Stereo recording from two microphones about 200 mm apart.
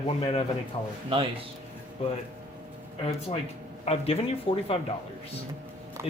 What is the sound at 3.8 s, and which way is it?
Speech, 30° left (ahead or behind).